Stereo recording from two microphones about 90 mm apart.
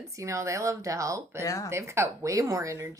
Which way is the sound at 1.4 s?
40° left (ahead or behind).